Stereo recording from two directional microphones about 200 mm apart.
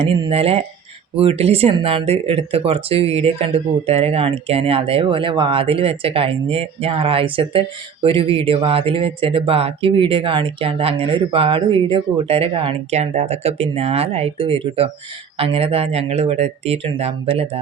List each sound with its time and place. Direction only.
0.0 s speech: 25° right (ahead or behind)